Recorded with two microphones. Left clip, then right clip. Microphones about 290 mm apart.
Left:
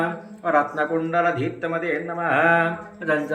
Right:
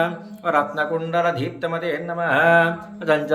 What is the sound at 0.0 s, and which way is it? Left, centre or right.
A man's voice, centre.